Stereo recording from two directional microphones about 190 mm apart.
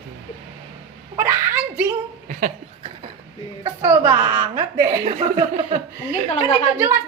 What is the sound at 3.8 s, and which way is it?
A woman's voice, 15° right (ahead or behind).